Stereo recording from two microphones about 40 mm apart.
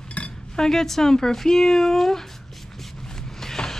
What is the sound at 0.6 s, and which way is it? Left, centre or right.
Speech, centre.